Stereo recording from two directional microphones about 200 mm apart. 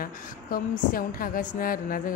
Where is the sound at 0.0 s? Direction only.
45° left (ahead or behind).